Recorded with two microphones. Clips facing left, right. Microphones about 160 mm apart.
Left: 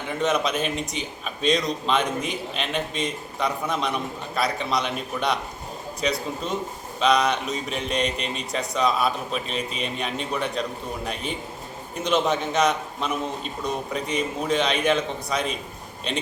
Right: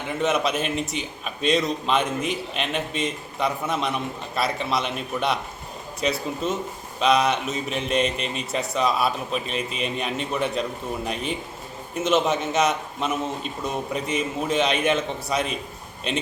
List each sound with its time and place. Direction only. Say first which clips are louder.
0.2 s a man's voice: even; 5° right (ahead or behind)